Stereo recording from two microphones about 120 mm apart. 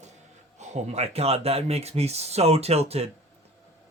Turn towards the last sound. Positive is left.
turn(degrees=-60)  # may be behind; listen again after turning